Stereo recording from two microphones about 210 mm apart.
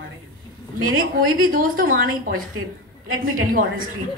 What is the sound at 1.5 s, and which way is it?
Speech, 40° right (ahead or behind).